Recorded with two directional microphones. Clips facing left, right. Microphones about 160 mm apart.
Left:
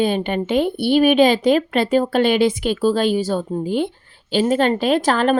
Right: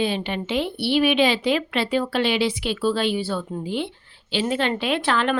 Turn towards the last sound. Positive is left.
turn(degrees=40)  # may be behind; listen again after turning